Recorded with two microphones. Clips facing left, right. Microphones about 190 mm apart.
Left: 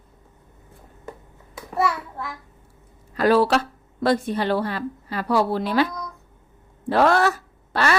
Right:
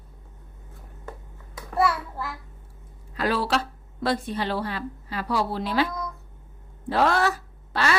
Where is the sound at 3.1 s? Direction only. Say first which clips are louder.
Left 7 dB; 45° left (ahead or behind).